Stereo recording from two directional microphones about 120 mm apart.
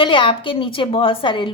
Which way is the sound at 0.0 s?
45° left (ahead or behind).